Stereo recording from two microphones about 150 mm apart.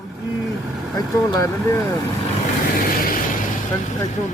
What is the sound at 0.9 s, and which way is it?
Speech, 20° left (ahead or behind).